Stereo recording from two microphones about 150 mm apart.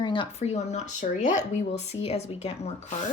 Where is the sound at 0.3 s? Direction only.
50° left (ahead or behind).